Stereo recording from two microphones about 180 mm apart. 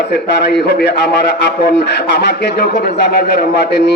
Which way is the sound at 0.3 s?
70° left (ahead or behind).